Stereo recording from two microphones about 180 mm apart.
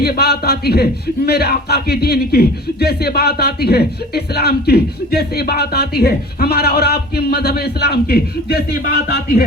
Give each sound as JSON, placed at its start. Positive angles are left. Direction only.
{"t": 0.0, "sound": "speech", "side_deg": 60}